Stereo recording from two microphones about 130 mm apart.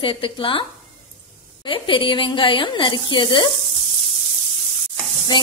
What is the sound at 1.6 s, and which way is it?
A woman's voice, 40° left (ahead or behind).